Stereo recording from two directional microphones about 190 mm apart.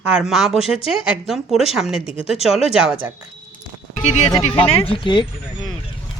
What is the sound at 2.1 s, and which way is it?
Speech, 30° left (ahead or behind).